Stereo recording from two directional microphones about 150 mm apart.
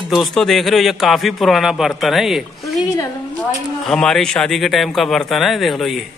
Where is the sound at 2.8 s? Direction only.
25° left (ahead or behind).